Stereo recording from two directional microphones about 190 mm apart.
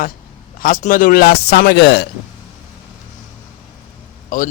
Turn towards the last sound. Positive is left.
turn(degrees=45)  # may be behind; listen again after turning